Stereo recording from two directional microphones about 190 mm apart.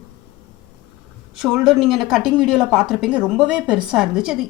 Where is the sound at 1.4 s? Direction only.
5° right (ahead or behind).